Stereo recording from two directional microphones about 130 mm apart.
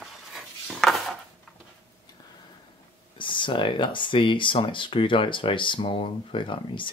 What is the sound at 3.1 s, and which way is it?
Speech, 40° left (ahead or behind).